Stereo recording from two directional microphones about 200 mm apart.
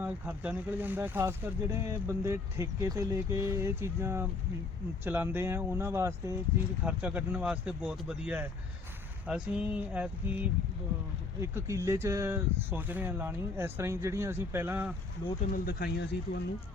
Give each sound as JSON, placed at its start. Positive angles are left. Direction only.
{"t": 0.0, "sound": "speech", "side_deg": -10}
{"t": 15.2, "sound": "speech", "side_deg": 20}
{"t": 15.5, "sound": "speech", "side_deg": 50}